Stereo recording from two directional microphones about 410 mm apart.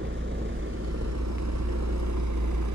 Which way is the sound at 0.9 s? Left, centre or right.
Right.